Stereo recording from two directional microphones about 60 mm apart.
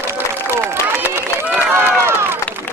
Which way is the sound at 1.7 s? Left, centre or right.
Right.